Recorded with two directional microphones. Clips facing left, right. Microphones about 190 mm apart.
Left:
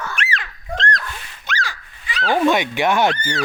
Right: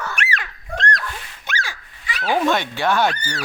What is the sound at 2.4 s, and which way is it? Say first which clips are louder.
Fowl: left 3 dB; 15° left (ahead or behind).